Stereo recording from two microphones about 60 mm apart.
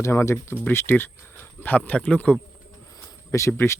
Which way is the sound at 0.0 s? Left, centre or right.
Left.